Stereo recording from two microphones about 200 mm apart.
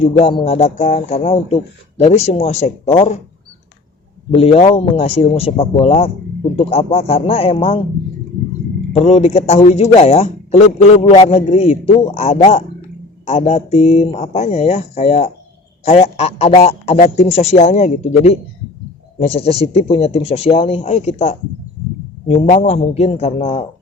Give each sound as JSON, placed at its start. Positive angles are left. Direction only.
{"t": 0.0, "sound": "a man's voice", "side_deg": 30}
{"t": 4.3, "sound": "a man's voice", "side_deg": 30}
{"t": 8.9, "sound": "a man's voice", "side_deg": 30}